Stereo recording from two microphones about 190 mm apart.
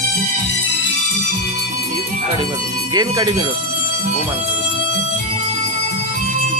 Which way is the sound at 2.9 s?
20° right (ahead or behind).